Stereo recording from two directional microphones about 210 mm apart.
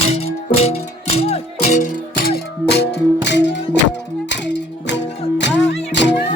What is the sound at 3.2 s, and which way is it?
Music, 55° left (ahead or behind).